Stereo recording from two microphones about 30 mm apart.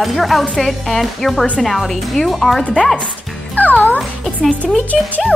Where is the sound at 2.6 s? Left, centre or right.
Left.